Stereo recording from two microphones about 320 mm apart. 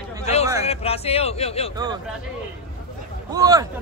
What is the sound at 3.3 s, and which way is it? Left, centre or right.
Speech, centre.